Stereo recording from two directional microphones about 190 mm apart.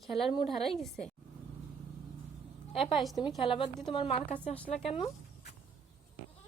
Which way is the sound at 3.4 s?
25° left (ahead or behind).